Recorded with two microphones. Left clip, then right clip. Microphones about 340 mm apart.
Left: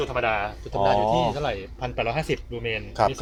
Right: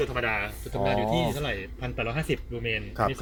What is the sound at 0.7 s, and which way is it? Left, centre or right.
Speech, left.